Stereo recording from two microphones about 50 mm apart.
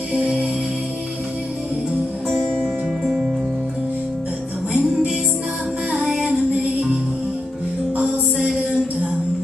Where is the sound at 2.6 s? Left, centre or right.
Centre.